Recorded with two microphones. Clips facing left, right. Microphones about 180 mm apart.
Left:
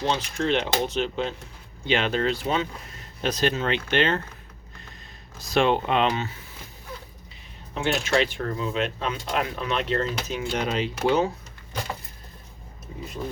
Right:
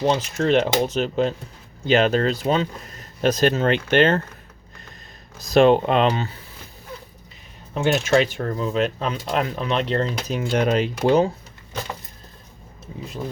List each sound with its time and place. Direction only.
0.3 s speech: 45° right (ahead or behind)
5.4 s speech: 40° right (ahead or behind)
7.7 s speech: 45° right (ahead or behind)
10.2 s speech: 45° right (ahead or behind)
11.0 s speech: 35° right (ahead or behind)